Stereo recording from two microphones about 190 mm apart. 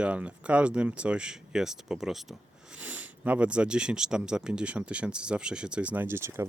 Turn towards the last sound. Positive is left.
turn(degrees=-15)  # may be behind; listen again after turning